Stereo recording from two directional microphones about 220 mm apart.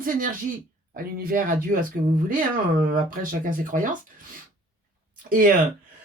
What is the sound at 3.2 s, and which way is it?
Speech, 40° right (ahead or behind).